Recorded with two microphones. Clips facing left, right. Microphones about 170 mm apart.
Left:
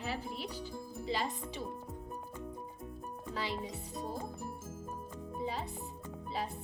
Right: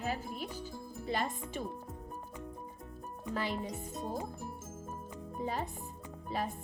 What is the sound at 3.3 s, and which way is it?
Music, 50° right (ahead or behind).